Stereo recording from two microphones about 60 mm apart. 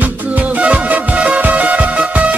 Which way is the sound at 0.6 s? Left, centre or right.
Right.